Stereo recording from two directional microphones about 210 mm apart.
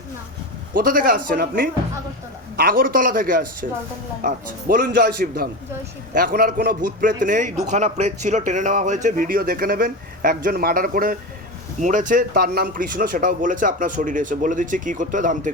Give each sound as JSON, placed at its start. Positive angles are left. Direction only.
{"t": 0.7, "sound": "a man's voice", "side_deg": -40}